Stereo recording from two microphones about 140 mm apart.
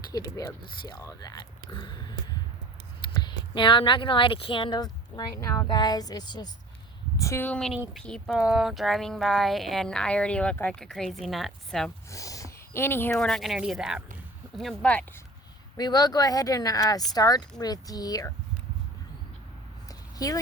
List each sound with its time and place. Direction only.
0.1 s speech: 25° left (ahead or behind)
3.2 s speech: 35° left (ahead or behind)
7.2 s speech: 20° left (ahead or behind); by 11.9 s centre (ahead or behind)
12.1 s speech: 25° left (ahead or behind)
13.1 s speech: 5° left (ahead or behind)
15.8 s speech: 25° left (ahead or behind)
19.9 s a sound: 25° left (ahead or behind)